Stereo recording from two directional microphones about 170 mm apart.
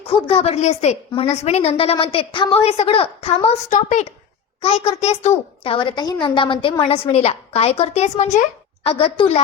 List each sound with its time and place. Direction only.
0.0 s a woman's voice: 30° left (ahead or behind)